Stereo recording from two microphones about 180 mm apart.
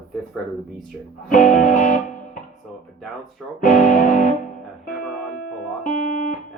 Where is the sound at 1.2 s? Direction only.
45° left (ahead or behind).